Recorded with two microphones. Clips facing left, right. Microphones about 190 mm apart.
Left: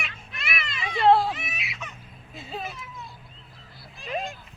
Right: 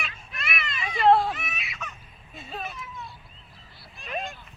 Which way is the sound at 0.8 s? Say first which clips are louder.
Left 1 dB; 30° left (ahead or behind).